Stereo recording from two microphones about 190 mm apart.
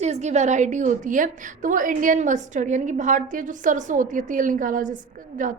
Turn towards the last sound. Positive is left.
turn(degrees=-45)  # may be behind; listen again after turning